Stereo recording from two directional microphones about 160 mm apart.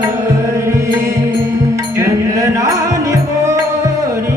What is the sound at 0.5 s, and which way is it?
Music, 20° right (ahead or behind).